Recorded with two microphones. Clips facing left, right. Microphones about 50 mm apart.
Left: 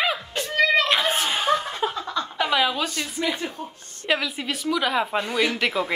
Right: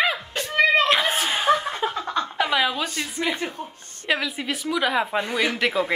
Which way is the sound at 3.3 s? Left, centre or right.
Right.